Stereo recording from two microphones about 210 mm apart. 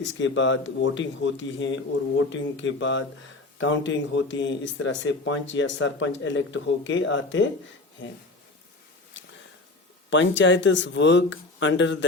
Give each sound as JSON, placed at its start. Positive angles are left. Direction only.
{"t": 0.0, "sound": "speech", "side_deg": 60}
{"t": 9.2, "sound": "a sound", "side_deg": 60}
{"t": 10.1, "sound": "speech", "side_deg": 60}